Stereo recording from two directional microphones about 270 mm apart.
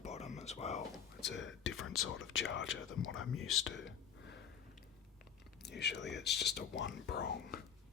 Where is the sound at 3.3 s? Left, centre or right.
Left.